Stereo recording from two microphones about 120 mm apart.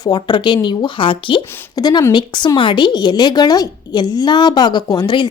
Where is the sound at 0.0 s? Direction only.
35° left (ahead or behind).